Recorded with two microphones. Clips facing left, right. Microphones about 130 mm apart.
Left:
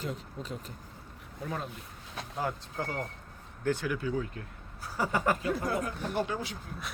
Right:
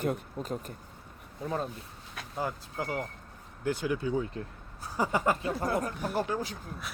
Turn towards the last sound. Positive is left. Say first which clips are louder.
# right 1 dB
turn(degrees=-40)  # may be behind; listen again after turning